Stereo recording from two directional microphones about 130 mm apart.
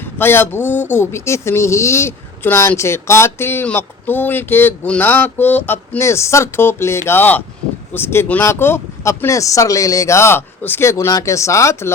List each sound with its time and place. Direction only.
0.0 s speech: 15° left (ahead or behind)